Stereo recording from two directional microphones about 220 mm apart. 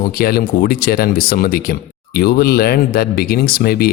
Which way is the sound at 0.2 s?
45° left (ahead or behind).